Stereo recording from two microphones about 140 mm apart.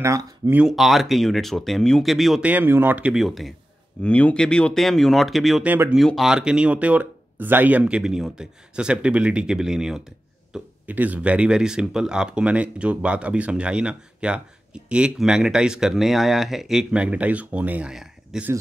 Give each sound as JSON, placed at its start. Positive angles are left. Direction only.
{"t": 0.0, "sound": "speech", "side_deg": -20}
{"t": 0.6, "sound": "speech", "side_deg": 0}
{"t": 5.7, "sound": "speech", "side_deg": -10}
{"t": 5.9, "sound": "speech", "side_deg": 0}